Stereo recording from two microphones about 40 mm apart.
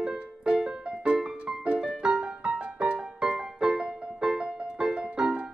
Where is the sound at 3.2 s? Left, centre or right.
Centre.